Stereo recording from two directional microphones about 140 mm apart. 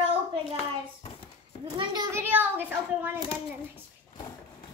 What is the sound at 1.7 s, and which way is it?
Speech, 30° right (ahead or behind).